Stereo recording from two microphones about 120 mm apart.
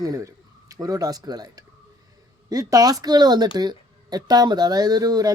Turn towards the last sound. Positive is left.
turn(degrees=-35)  # may be behind; listen again after turning